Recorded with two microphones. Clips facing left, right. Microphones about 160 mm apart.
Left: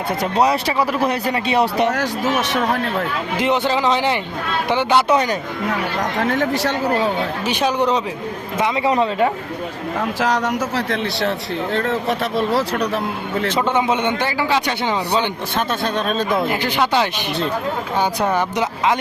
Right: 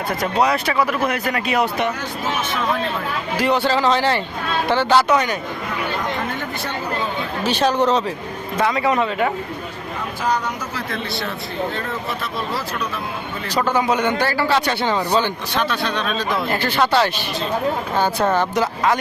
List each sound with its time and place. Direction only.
0.2 s speech: 30° left (ahead or behind)
3.3 s a man's voice: 20° left (ahead or behind)
5.0 s a man's voice: 30° left (ahead or behind)
6.1 s speech: 75° left (ahead or behind)
7.4 s a man's voice: 10° left (ahead or behind); by 9.3 s 30° left (ahead or behind)
10.2 s speech: 90° left; by 13.5 s 75° left (ahead or behind)
13.5 s a man's voice: 20° left (ahead or behind)
15.5 s speech: 45° left (ahead or behind)
16.5 s a man's voice: 15° left (ahead or behind)